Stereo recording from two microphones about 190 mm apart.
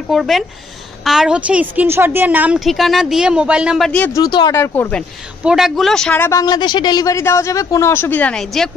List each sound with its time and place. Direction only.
0.1 s a woman's voice: centre (ahead or behind)
4.2 s speech: 20° left (ahead or behind)
5.4 s a woman's voice: 5° right (ahead or behind)
6.4 s speech: 25° left (ahead or behind); by 8.6 s 5° left (ahead or behind)